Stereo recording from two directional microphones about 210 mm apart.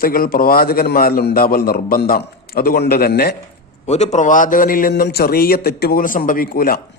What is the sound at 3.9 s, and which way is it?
A man's voice, 35° left (ahead or behind).